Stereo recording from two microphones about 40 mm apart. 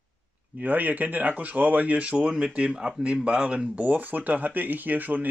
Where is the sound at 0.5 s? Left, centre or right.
Right.